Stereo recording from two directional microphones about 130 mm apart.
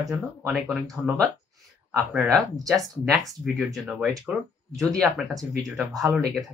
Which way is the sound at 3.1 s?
Centre (ahead or behind).